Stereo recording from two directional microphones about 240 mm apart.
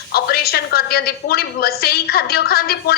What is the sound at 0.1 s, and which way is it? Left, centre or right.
A woman's voice, left.